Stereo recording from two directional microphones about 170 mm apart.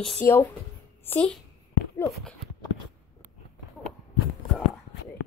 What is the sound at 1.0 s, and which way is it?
Speech, 10° left (ahead or behind).